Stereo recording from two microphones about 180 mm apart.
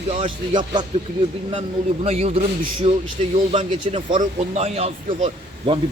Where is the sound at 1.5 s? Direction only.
35° right (ahead or behind).